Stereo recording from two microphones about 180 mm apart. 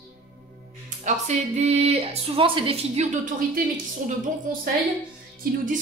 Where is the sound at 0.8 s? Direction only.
45° right (ahead or behind).